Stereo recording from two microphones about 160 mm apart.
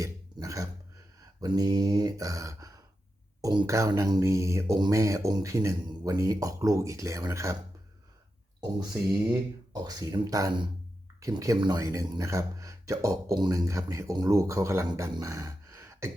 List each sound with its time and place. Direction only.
0.0 s a sound: 20° right (ahead or behind)
1.4 s speech: 25° right (ahead or behind)
9.7 s speech: 25° right (ahead or behind)